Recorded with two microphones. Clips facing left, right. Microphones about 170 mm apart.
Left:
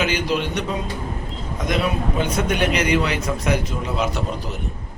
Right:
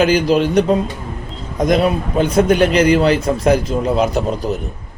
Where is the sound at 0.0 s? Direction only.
40° right (ahead or behind).